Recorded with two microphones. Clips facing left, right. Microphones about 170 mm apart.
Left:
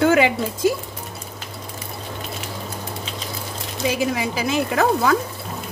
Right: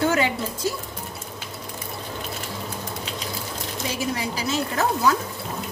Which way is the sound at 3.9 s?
55° left (ahead or behind).